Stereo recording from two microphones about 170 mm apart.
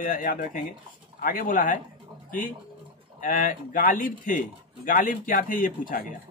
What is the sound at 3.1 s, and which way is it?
A man's voice, 55° left (ahead or behind).